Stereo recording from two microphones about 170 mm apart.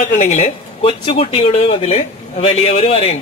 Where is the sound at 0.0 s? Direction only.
45° left (ahead or behind).